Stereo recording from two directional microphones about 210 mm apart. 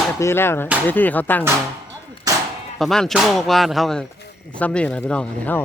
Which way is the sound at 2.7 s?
Centre (ahead or behind).